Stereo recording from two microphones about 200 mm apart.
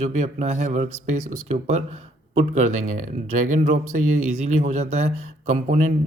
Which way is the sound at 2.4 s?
35° right (ahead or behind).